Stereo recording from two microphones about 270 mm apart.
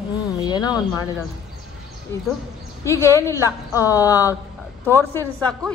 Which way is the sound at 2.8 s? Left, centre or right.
Centre.